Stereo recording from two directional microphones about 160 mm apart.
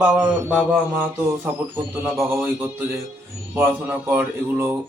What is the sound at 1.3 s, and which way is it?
A man's voice, 15° right (ahead or behind).